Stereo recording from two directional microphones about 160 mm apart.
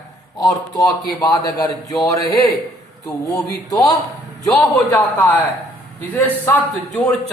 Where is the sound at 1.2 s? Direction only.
25° left (ahead or behind).